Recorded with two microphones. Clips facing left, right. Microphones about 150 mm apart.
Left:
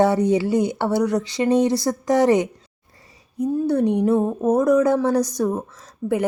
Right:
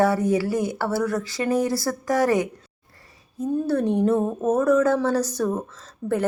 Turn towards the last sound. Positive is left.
turn(degrees=5)  # may be behind; listen again after turning